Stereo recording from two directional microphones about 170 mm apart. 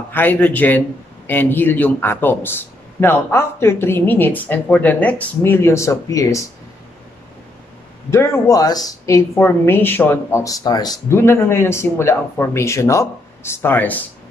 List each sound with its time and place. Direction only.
0.1 s a man's voice: 10° left (ahead or behind)
8.1 s a man's voice: 15° left (ahead or behind)